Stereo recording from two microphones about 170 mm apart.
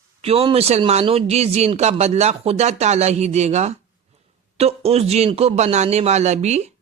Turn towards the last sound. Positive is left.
turn(degrees=-40)  # may be behind; listen again after turning